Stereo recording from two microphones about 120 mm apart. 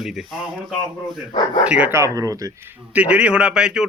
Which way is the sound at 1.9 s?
25° right (ahead or behind).